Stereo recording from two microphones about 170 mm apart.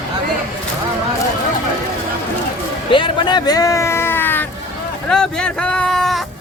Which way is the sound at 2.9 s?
30° left (ahead or behind).